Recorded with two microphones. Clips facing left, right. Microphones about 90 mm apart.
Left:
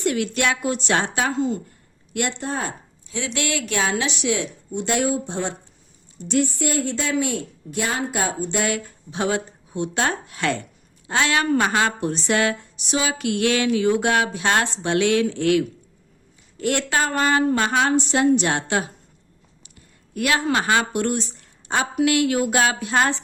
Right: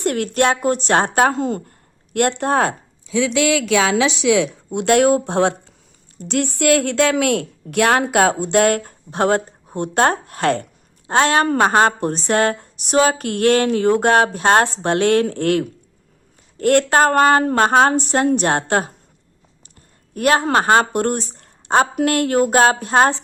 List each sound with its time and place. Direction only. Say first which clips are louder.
0.0 s a woman's voice: right 4 dB; 50° right (ahead or behind); by 2.7 s 75° right (ahead or behind)
3.6 s a woman's voice: right 7 dB; 90° right; by 18.9 s 45° right (ahead or behind)
20.1 s speech: right 5 dB; 40° right (ahead or behind)